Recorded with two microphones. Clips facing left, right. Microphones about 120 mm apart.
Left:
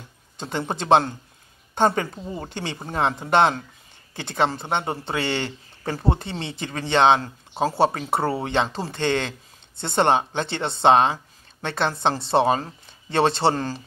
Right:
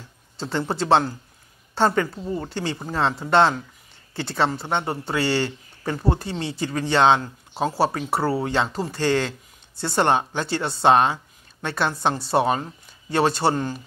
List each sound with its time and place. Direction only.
0.4 s speech: 20° left (ahead or behind)